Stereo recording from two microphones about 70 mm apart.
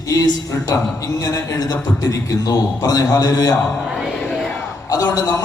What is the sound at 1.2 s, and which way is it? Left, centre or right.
A man's voice, left.